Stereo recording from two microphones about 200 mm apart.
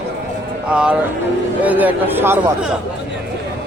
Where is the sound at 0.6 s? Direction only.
5° right (ahead or behind).